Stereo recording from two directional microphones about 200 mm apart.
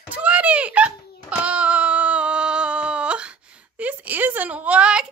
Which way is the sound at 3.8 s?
10° right (ahead or behind).